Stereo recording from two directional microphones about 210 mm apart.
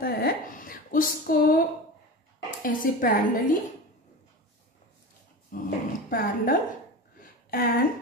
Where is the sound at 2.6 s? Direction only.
40° left (ahead or behind).